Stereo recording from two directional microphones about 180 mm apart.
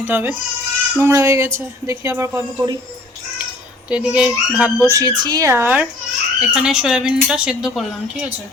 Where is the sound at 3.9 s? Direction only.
5° right (ahead or behind).